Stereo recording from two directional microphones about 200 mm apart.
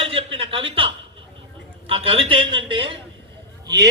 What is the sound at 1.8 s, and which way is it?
A man's voice, 30° right (ahead or behind).